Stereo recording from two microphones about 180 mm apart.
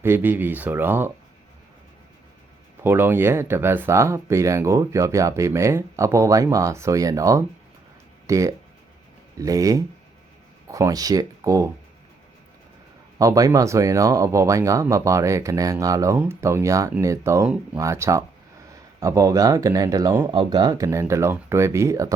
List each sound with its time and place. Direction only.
0.0 s speech: 10° right (ahead or behind)
2.8 s speech: 10° right (ahead or behind)
13.1 s speech: 20° right (ahead or behind)